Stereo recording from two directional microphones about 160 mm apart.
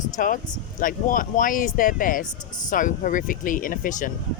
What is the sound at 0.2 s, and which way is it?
Speech, 60° left (ahead or behind).